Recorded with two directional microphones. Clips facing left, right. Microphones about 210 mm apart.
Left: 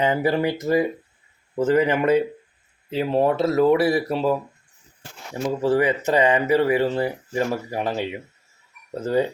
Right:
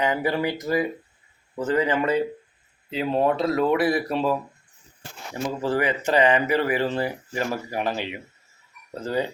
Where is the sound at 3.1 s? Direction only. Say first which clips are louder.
Left 2 dB; 25° left (ahead or behind).